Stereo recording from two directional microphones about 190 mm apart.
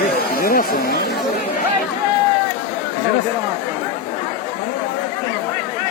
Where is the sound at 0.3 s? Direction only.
50° left (ahead or behind).